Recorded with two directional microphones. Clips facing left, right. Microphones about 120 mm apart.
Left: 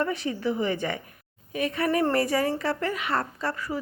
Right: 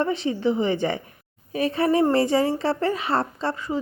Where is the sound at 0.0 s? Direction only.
25° right (ahead or behind).